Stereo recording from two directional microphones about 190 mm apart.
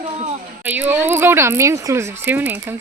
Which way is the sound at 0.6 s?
10° right (ahead or behind).